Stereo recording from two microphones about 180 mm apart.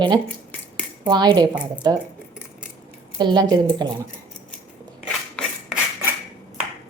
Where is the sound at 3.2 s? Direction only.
25° right (ahead or behind).